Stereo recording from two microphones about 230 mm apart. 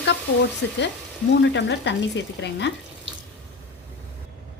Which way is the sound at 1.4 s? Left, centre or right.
Left.